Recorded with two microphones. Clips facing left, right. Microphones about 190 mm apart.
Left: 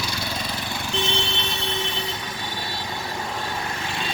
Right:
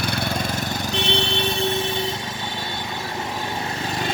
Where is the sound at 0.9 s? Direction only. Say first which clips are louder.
Right 2 dB; 65° right (ahead or behind).